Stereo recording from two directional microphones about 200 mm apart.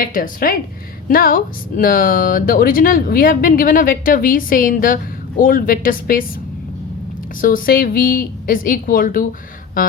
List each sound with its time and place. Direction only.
0.0 s speech: 45° left (ahead or behind)
7.4 s speech: 45° left (ahead or behind)